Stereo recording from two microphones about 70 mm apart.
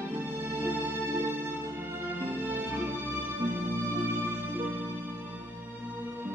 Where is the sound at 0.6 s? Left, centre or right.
Right.